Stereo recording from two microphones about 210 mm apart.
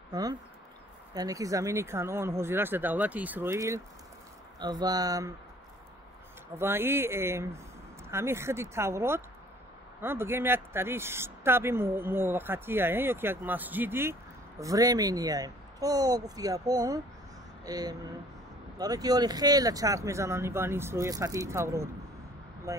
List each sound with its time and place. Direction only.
0.1 s speech: 20° right (ahead or behind)
6.6 s speech: 10° right (ahead or behind)